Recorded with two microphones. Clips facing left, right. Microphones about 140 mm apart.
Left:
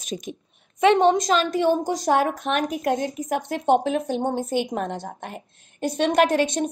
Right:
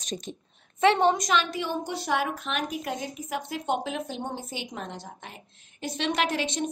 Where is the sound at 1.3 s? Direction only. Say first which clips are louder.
Left 7 dB; 45° left (ahead or behind).